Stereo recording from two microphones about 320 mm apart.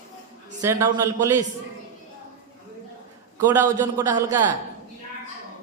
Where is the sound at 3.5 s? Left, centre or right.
Centre.